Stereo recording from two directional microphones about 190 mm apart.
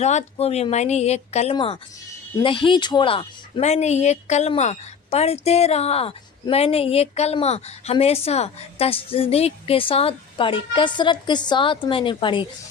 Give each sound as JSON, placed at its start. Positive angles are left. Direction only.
{"t": 0.0, "sound": "speech", "side_deg": 35}